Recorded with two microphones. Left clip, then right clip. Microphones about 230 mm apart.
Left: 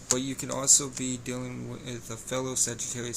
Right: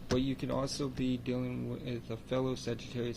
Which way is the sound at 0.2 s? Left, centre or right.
Centre.